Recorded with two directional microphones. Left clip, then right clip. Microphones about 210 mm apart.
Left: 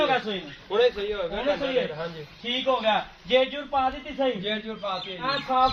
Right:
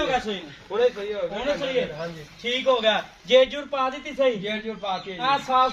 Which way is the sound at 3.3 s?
35° right (ahead or behind).